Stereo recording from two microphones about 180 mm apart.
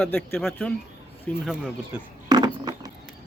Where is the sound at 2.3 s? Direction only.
20° right (ahead or behind).